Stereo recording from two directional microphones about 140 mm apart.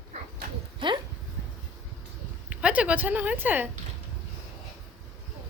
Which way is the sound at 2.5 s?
10° right (ahead or behind).